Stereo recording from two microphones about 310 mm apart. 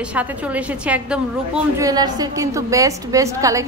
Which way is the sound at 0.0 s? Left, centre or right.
Centre.